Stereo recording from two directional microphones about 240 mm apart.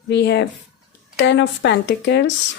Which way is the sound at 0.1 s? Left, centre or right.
Left.